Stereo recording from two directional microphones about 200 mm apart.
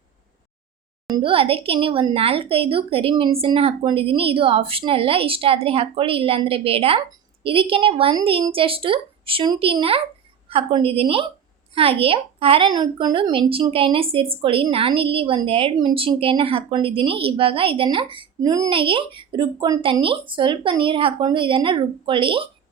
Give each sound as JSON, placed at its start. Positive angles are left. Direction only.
{"t": 1.1, "sound": "a woman's voice", "side_deg": -25}